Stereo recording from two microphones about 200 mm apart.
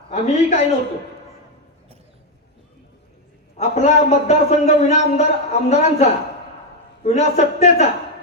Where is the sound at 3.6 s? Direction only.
35° left (ahead or behind).